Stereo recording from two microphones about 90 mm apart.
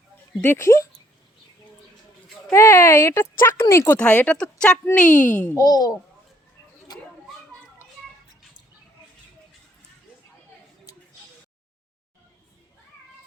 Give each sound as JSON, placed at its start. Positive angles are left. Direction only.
{"t": 0.4, "sound": "speech", "side_deg": 30}
{"t": 2.5, "sound": "speech", "side_deg": 30}
{"t": 3.9, "sound": "speech", "side_deg": 15}
{"t": 5.5, "sound": "a child's voice", "side_deg": 45}